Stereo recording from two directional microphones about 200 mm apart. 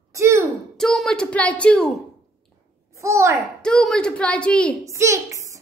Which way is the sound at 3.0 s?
15° right (ahead or behind).